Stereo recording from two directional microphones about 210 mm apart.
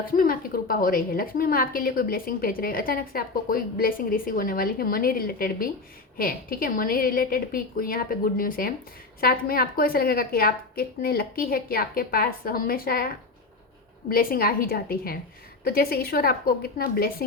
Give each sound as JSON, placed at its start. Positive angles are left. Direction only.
{"t": 0.1, "sound": "a woman's voice", "side_deg": 45}
{"t": 14.1, "sound": "a woman's voice", "side_deg": 45}